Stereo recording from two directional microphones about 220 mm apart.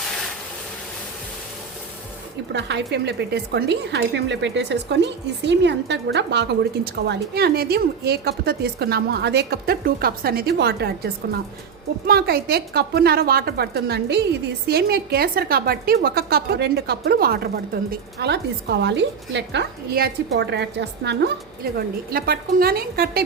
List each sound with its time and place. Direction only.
2.5 s speech: 50° right (ahead or behind)